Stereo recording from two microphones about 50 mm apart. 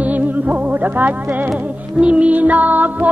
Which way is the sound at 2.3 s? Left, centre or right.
Right.